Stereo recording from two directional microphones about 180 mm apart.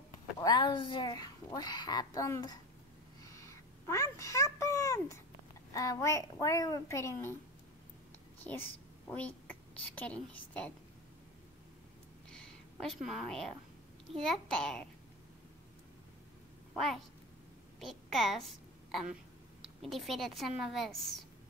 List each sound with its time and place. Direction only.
0.4 s a child's voice: 25° left (ahead or behind)
3.2 s a sound: 20° left (ahead or behind)
5.7 s a child's voice: 20° left (ahead or behind)
8.5 s a woman's voice: 10° left (ahead or behind)
12.8 s a woman's voice: centre (ahead or behind)
16.7 s a woman's voice: centre (ahead or behind)
19.8 s a woman's voice: centre (ahead or behind)